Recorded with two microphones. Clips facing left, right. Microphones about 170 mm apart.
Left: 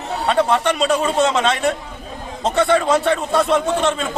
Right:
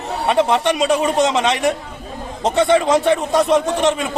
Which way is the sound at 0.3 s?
15° right (ahead or behind).